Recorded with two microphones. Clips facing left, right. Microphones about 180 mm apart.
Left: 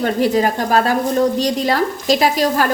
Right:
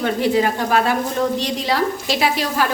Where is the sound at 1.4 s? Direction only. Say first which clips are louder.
Left 3 dB; 40° left (ahead or behind).